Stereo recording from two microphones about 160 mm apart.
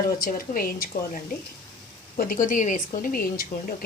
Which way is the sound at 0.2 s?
65° left (ahead or behind).